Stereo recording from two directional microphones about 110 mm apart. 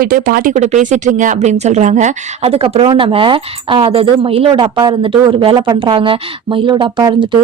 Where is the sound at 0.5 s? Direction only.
90° right.